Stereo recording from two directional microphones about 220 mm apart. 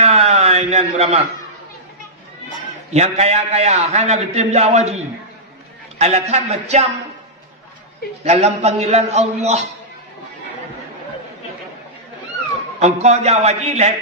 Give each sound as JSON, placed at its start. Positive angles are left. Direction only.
{"t": 0.0, "sound": "a sound", "side_deg": -30}
{"t": 2.9, "sound": "a man's voice", "side_deg": -30}
{"t": 8.2, "sound": "a man's voice", "side_deg": -30}
{"t": 12.8, "sound": "a man's voice", "side_deg": -30}